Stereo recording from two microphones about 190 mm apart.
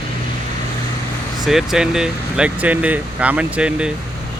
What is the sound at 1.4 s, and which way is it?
Speech, centre (ahead or behind).